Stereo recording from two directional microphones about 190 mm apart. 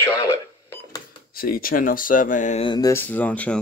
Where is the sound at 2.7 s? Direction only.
20° left (ahead or behind).